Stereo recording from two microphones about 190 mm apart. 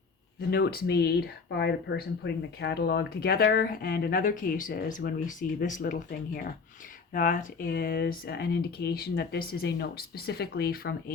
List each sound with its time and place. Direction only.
0.5 s speech: 55° left (ahead or behind)